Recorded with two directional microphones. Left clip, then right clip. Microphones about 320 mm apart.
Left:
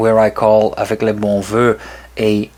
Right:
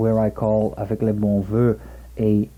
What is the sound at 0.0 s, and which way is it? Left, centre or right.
Speech, centre.